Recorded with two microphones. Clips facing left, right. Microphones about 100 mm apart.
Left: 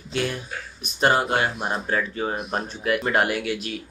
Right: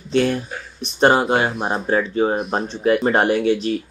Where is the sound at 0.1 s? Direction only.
40° right (ahead or behind).